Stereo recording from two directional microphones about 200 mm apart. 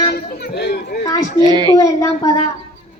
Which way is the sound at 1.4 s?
20° right (ahead or behind).